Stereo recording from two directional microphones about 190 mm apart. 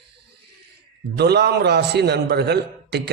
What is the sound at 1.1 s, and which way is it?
A man's voice, 60° right (ahead or behind).